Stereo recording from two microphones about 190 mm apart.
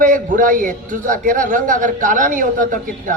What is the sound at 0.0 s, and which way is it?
A man's voice, 45° right (ahead or behind).